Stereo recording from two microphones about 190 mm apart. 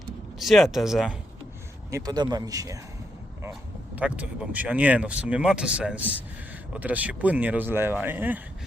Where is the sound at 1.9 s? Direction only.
20° right (ahead or behind).